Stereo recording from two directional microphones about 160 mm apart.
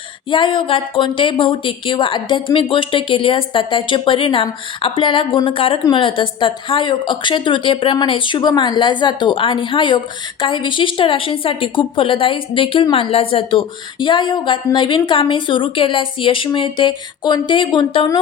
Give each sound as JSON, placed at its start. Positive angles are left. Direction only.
{"t": 0.3, "sound": "a woman's voice", "side_deg": 30}